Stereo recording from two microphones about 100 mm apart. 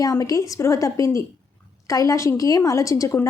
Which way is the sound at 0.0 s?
35° left (ahead or behind).